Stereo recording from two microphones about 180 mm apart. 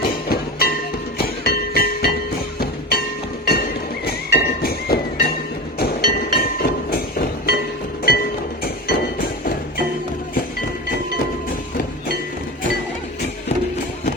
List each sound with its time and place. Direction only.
0.0 s music: 55° left (ahead or behind)
3.4 s music: 60° left (ahead or behind)
5.8 s a sound: 55° left (ahead or behind)
8.0 s music: 55° left (ahead or behind)